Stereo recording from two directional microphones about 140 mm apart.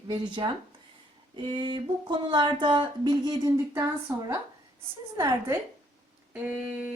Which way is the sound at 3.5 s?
20° right (ahead or behind).